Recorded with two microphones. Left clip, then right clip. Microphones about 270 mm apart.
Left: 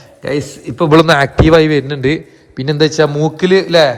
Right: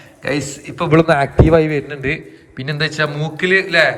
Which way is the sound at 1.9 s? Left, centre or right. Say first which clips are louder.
Left 6 dB; centre.